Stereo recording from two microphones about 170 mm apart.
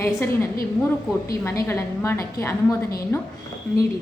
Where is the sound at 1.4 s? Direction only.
15° left (ahead or behind).